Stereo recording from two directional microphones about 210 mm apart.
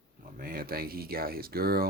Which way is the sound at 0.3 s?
45° right (ahead or behind).